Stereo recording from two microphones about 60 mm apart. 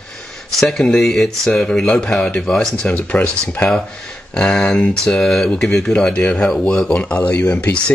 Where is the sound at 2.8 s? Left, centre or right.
Left.